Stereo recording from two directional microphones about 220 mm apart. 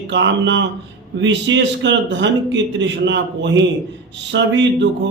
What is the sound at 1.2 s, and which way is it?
A man's voice, 55° right (ahead or behind).